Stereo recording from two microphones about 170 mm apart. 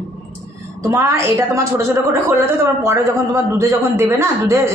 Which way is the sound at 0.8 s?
20° right (ahead or behind).